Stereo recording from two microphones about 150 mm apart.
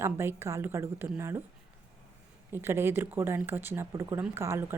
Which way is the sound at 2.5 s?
15° right (ahead or behind).